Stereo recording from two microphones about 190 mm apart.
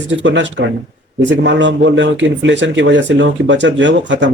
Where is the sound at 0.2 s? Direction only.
75° right (ahead or behind).